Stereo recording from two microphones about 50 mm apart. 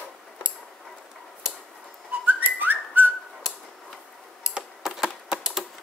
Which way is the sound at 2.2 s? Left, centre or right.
Right.